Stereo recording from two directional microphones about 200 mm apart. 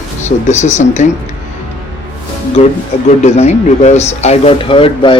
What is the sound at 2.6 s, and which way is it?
Speech, 35° left (ahead or behind).